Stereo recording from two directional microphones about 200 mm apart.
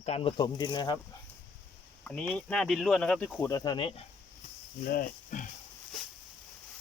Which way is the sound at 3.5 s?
20° left (ahead or behind).